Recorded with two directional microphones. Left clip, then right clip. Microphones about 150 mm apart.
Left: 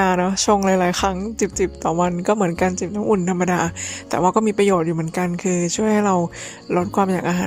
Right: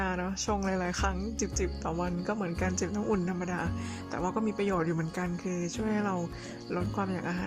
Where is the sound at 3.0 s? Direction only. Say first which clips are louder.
Left 17 dB; 35° left (ahead or behind).